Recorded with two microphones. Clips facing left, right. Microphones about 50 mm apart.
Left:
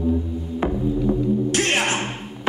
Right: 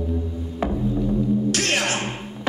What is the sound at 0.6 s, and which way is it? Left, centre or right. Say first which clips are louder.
Music: left 1 dB; left.